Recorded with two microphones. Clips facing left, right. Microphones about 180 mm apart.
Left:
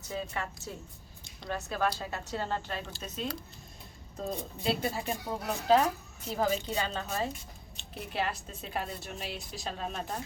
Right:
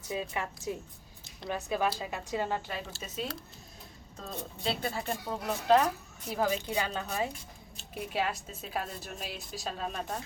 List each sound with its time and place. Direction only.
0.1 s speech: 15° right (ahead or behind); by 10.2 s centre (ahead or behind)